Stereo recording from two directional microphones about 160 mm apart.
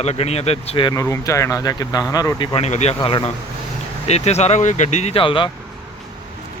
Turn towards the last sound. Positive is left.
turn(degrees=30)  # may be behind; listen again after turning